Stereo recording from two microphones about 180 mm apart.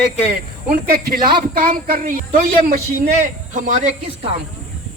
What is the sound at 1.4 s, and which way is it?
Speech, 50° right (ahead or behind).